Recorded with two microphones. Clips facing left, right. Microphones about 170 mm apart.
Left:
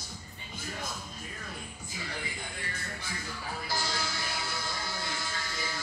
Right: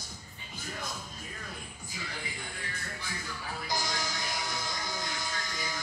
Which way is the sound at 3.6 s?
15° right (ahead or behind).